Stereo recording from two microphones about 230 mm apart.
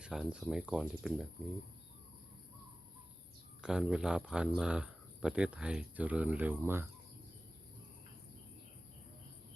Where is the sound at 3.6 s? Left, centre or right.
Centre.